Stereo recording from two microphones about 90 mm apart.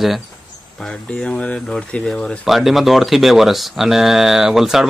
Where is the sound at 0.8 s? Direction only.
10° left (ahead or behind).